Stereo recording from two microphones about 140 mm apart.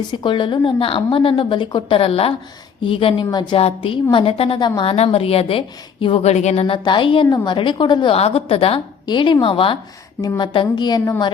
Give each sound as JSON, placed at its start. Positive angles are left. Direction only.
{"t": 0.1, "sound": "a woman's voice", "side_deg": 35}
{"t": 3.6, "sound": "a woman's voice", "side_deg": 45}
{"t": 6.8, "sound": "a woman's voice", "side_deg": 35}